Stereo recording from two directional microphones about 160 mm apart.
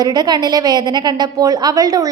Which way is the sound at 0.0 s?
25° right (ahead or behind).